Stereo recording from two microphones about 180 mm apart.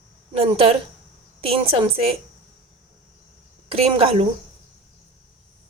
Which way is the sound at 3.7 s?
35° right (ahead or behind).